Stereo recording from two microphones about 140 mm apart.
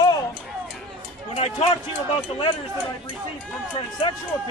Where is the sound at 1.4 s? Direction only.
45° left (ahead or behind).